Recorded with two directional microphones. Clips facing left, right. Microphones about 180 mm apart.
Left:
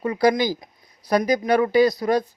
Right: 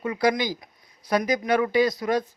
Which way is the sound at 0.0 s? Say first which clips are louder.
Left 4 dB; 35° left (ahead or behind).